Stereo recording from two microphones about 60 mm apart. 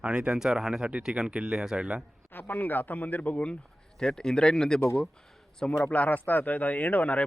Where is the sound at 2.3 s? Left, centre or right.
Left.